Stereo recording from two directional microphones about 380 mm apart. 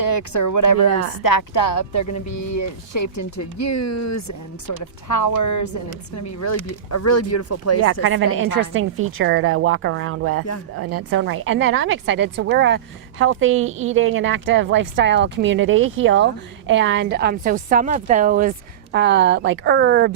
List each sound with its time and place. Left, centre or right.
0.0 s speech: left
8.0 s a woman's voice: right